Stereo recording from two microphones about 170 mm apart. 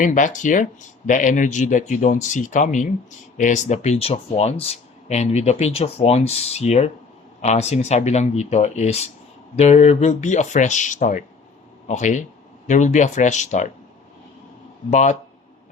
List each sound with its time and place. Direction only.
0.0 s speech: 50° left (ahead or behind)
14.8 s speech: 45° left (ahead or behind)